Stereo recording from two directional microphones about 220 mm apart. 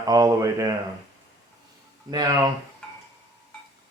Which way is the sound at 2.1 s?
15° right (ahead or behind).